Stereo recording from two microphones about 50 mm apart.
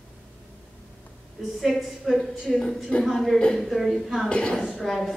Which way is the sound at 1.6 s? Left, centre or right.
Centre.